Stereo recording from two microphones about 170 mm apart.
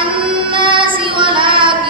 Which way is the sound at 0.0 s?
30° right (ahead or behind).